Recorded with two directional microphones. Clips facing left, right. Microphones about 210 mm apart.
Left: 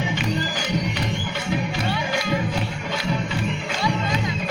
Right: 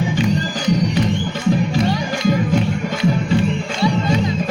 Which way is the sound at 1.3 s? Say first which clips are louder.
Right 8 dB; 40° right (ahead or behind).